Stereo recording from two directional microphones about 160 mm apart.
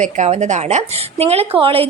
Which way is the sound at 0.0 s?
45° right (ahead or behind).